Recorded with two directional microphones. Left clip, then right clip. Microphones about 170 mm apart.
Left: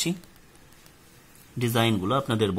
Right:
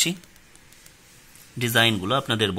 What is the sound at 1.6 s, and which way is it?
Speech, 5° left (ahead or behind).